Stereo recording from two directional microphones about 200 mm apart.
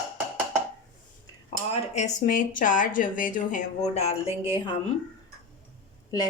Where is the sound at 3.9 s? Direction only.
30° left (ahead or behind).